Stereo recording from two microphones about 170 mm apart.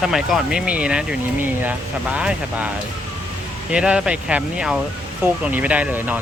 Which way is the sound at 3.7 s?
5° right (ahead or behind).